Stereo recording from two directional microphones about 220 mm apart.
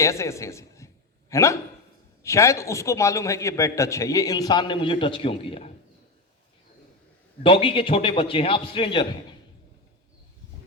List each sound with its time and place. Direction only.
0.0 s a man's voice: 15° left (ahead or behind)
7.4 s a man's voice: 25° left (ahead or behind)